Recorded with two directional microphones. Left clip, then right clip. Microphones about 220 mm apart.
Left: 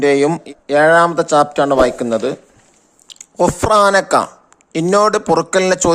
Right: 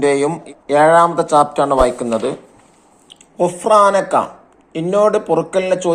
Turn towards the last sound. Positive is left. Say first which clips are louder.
# left 2 dB
turn(degrees=50)  # may be behind; listen again after turning